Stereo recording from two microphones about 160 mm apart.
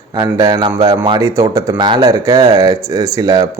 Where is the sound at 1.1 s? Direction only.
20° right (ahead or behind).